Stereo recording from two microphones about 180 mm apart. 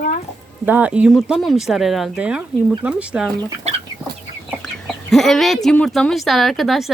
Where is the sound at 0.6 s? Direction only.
10° right (ahead or behind).